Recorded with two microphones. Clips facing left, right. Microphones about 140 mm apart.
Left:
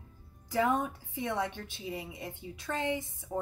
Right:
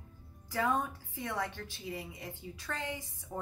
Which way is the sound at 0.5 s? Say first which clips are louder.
Left 3 dB; 20° left (ahead or behind).